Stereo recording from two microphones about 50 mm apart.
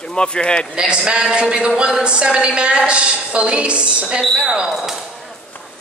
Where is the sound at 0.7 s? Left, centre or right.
Centre.